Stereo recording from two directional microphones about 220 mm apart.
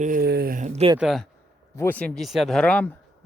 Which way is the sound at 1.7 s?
10° left (ahead or behind).